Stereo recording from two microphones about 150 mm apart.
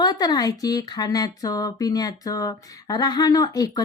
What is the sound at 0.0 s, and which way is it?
Speech, 25° left (ahead or behind).